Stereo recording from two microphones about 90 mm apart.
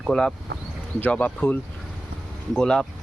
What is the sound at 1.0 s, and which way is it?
Speech, 20° left (ahead or behind).